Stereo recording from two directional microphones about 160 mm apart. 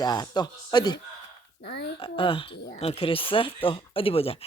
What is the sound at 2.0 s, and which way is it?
Speech, 35° left (ahead or behind).